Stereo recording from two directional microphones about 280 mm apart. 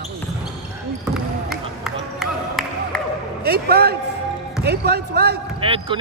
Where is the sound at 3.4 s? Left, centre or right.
Right.